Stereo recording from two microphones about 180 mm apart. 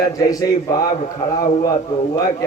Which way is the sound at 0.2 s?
20° left (ahead or behind).